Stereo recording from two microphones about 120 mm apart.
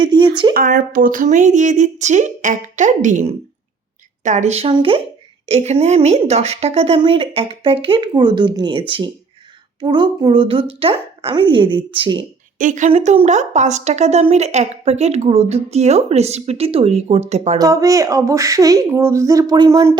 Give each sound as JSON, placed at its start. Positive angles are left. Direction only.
{"t": 0.0, "sound": "speech", "side_deg": -40}
{"t": 0.7, "sound": "speech", "side_deg": -90}
{"t": 4.7, "sound": "a woman's voice", "side_deg": -50}
{"t": 12.5, "sound": "a woman's voice", "side_deg": -90}
{"t": 12.9, "sound": "a woman's voice", "side_deg": -75}
{"t": 17.6, "sound": "speech", "side_deg": -30}